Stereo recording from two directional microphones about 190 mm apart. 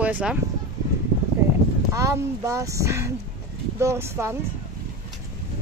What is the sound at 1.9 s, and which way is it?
Speech, 15° right (ahead or behind).